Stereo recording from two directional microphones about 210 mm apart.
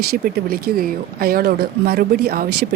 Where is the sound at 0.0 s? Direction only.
45° right (ahead or behind).